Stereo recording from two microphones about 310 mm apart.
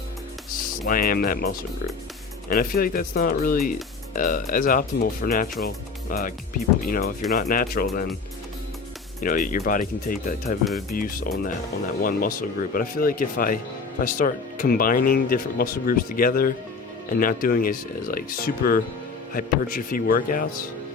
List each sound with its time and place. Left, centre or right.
0.9 s speech: left
2.5 s speech: left
9.2 s speech: left